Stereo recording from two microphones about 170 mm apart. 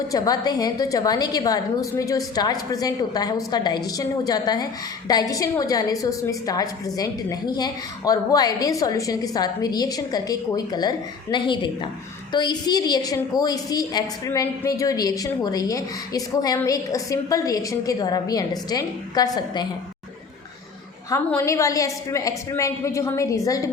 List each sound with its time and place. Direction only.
0.1 s a woman's voice: 20° left (ahead or behind)
21.2 s a woman's voice: 15° left (ahead or behind)